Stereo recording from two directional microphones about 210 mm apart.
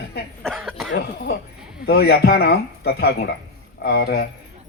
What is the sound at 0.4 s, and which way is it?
Cough, centre (ahead or behind).